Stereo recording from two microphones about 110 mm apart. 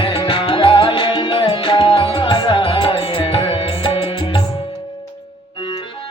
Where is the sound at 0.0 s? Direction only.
50° left (ahead or behind).